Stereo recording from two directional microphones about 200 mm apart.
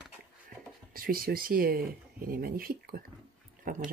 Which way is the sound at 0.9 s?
45° right (ahead or behind).